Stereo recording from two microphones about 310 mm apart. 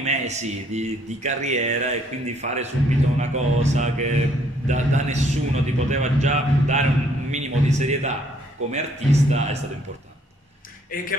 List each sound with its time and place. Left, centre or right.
0.0 s a man's voice: right